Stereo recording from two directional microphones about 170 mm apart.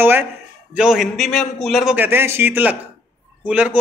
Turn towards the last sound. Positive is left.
turn(degrees=-10)  # may be behind; listen again after turning